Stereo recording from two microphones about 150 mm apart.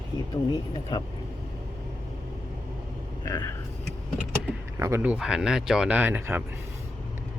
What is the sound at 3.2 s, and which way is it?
Speech, 25° left (ahead or behind).